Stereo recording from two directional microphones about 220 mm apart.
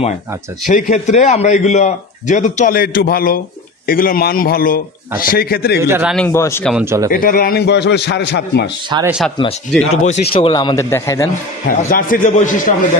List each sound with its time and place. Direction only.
0.7 s a man's voice: 35° left (ahead or behind)
5.8 s a man's voice: 10° right (ahead or behind)
6.1 s speech: 10° left (ahead or behind)
6.7 s a man's voice: 10° right (ahead or behind)
7.1 s a man's voice: 40° left (ahead or behind)
9.0 s speech: 5° right (ahead or behind)
9.8 s a man's voice: 30° left (ahead or behind); by 11.2 s 15° left (ahead or behind)
11.6 s a man's voice: 40° left (ahead or behind)